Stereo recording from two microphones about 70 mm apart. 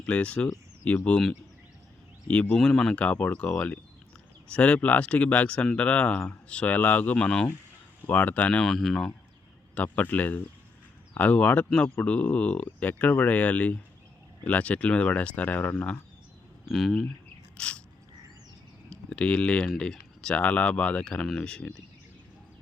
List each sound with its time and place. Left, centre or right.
0.0 s speech: centre
2.2 s speech: centre
8.6 s speech: centre
9.7 s speech: left
16.7 s speech: centre
17.6 s biting: centre
18.9 s speech: centre